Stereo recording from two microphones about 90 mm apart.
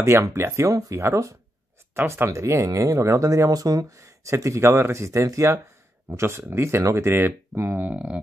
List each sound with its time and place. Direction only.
0.0 s speech: 30° right (ahead or behind); by 8.2 s 15° right (ahead or behind)